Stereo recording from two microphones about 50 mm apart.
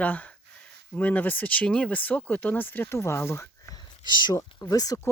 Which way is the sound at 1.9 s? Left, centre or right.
Left.